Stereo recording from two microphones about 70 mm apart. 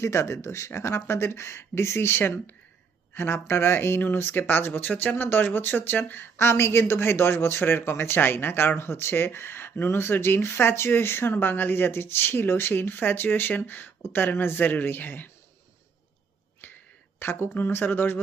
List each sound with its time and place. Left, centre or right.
0.0 s speech: left
17.2 s speech: left